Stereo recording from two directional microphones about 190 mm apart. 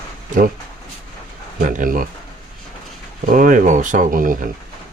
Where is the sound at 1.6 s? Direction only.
45° right (ahead or behind).